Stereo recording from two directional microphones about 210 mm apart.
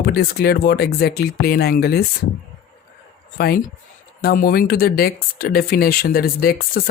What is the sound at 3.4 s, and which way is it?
Speech, 45° left (ahead or behind).